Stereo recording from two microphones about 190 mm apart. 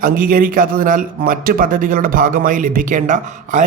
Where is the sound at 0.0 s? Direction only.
45° right (ahead or behind).